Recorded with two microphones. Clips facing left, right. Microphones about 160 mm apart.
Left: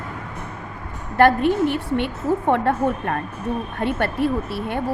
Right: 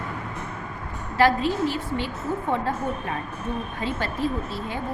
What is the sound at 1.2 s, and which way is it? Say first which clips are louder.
A woman's voice: left 5 dB; 60° left (ahead or behind).